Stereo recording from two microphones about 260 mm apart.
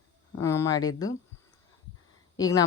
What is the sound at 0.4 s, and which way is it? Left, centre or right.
Speech, centre.